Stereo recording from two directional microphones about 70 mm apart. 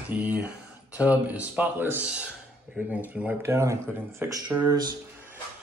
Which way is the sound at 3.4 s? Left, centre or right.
Right.